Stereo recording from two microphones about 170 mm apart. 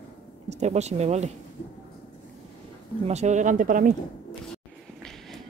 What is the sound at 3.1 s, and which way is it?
Speech, 40° right (ahead or behind).